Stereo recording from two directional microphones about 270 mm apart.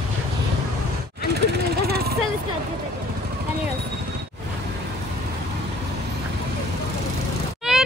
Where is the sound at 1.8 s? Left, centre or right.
Right.